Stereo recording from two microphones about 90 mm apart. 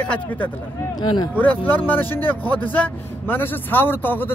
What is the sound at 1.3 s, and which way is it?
Speech, 20° left (ahead or behind).